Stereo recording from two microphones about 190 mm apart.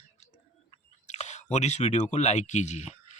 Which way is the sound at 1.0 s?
35° left (ahead or behind).